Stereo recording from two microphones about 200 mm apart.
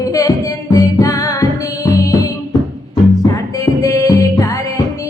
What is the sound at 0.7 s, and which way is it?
Music, 15° left (ahead or behind).